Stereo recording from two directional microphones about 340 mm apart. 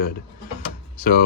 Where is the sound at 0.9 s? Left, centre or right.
Left.